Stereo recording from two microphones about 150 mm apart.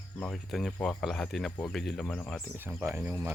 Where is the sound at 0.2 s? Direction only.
Centre (ahead or behind).